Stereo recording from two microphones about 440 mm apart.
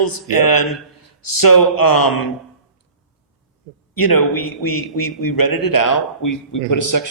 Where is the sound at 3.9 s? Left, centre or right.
Left.